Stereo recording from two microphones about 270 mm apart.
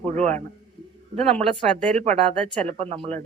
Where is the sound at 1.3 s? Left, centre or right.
Right.